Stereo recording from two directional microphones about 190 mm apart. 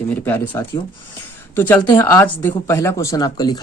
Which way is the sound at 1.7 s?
15° left (ahead or behind).